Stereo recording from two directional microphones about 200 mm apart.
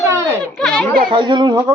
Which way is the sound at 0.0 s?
15° right (ahead or behind).